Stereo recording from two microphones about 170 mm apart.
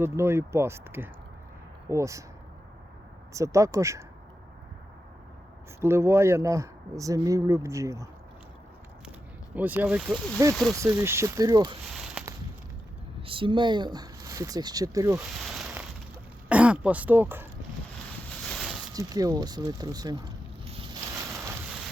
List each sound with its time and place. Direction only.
0.0 s speech: 15° right (ahead or behind)
3.3 s speech: 20° right (ahead or behind)
5.8 s speech: 15° right (ahead or behind)
9.6 s speech: 10° right (ahead or behind)
10.1 s speech: 5° left (ahead or behind)
10.8 s speech: 15° right (ahead or behind)
13.2 s speech: 30° right (ahead or behind)
15.4 s a sound: centre (ahead or behind)
16.5 s speech: 10° right (ahead or behind)
18.4 s a sound: centre (ahead or behind)
18.9 s speech: 20° right (ahead or behind)
20.9 s a sound: 20° right (ahead or behind)